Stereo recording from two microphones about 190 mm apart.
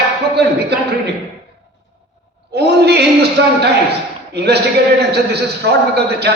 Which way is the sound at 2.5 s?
60° right (ahead or behind).